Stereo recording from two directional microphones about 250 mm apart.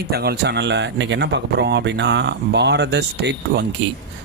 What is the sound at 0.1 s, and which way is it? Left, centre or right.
Speech, right.